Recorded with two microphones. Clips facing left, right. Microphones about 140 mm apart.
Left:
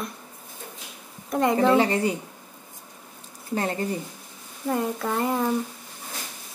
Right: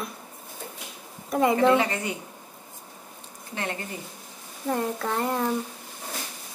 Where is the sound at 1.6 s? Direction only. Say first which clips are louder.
Left 2 dB; 35° left (ahead or behind).